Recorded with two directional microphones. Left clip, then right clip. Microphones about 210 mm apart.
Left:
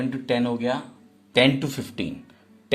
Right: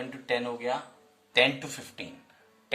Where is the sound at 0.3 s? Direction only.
40° left (ahead or behind).